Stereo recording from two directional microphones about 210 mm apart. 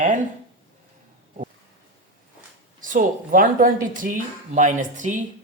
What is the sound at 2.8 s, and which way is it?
Speech, 40° right (ahead or behind).